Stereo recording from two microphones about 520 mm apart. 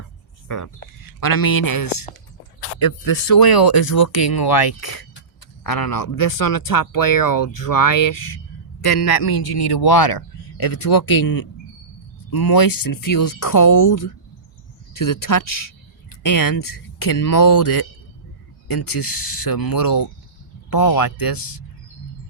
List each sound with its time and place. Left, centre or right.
0.4 s a man's voice: left